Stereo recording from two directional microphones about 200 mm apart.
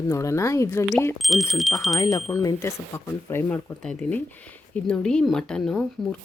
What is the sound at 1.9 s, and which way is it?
Speech, 15° left (ahead or behind).